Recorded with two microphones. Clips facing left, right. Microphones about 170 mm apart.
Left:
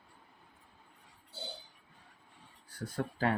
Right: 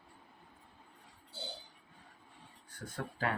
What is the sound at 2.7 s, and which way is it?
Speech, 35° left (ahead or behind).